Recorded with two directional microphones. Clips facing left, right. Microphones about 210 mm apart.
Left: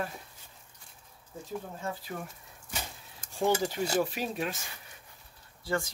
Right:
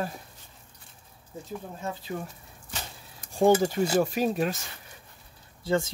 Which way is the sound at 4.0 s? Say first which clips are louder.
Right 7 dB; 45° right (ahead or behind).